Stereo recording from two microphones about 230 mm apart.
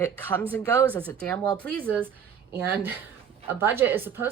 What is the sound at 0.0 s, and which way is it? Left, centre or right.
Speech, centre.